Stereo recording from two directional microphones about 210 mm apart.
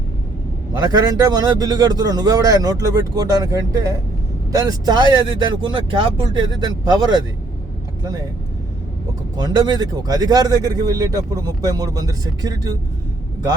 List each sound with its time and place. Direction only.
0.7 s speech: 20° right (ahead or behind)
9.4 s speech: 20° right (ahead or behind)